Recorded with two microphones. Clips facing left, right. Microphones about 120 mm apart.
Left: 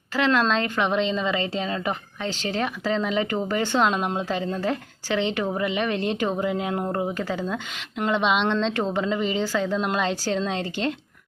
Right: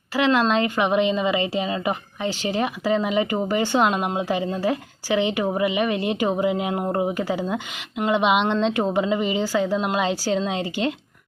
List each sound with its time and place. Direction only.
0.1 s speech: 10° right (ahead or behind)